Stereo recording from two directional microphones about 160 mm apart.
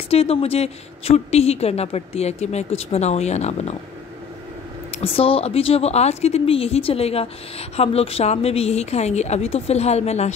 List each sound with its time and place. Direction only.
0.1 s a woman's voice: 40° left (ahead or behind)
4.9 s a woman's voice: 35° left (ahead or behind)